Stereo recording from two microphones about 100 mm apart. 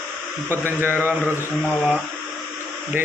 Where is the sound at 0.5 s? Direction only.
20° right (ahead or behind).